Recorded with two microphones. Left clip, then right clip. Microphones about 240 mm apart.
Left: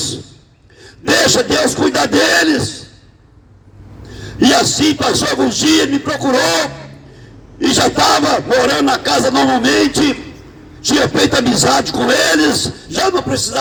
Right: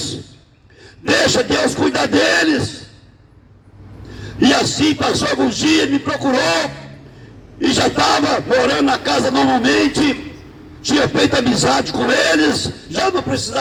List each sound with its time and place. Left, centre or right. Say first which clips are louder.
1.0 s speech: left 2 dB; left
4.2 s speech: left 3 dB; left